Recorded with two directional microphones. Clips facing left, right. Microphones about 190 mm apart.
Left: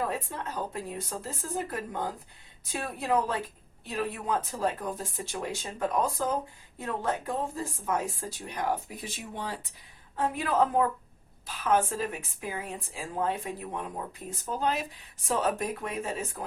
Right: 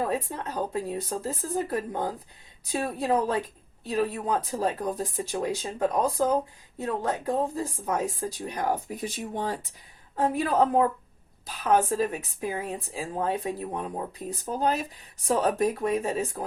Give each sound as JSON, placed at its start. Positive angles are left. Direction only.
{"t": 0.1, "sound": "a woman's voice", "side_deg": -35}